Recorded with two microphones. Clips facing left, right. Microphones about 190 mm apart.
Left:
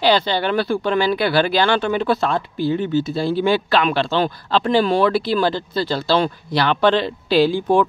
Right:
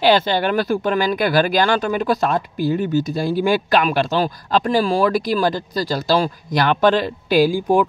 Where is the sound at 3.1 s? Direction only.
10° right (ahead or behind).